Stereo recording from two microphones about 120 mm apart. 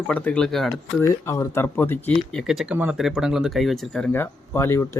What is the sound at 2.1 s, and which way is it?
Speech, centre (ahead or behind).